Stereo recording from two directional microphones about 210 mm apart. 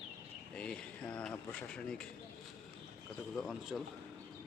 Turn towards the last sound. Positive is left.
turn(degrees=0)  # may be behind; listen again after turning